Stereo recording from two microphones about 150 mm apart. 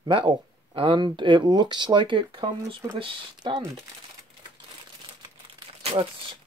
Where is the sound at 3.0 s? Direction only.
35° right (ahead or behind).